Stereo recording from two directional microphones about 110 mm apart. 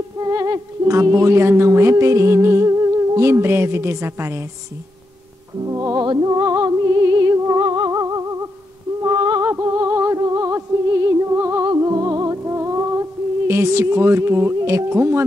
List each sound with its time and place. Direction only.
0.2 s music: 30° right (ahead or behind)
5.7 s music: 30° right (ahead or behind)
9.0 s a sound: 35° right (ahead or behind)
9.5 s music: 30° right (ahead or behind)
11.6 s music: 35° right (ahead or behind)